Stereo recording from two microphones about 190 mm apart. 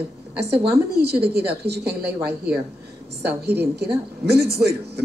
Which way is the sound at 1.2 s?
60° right (ahead or behind).